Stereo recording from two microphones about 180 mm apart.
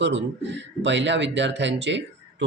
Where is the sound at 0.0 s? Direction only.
80° right.